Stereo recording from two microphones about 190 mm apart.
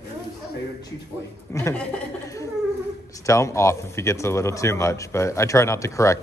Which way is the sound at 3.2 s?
15° left (ahead or behind).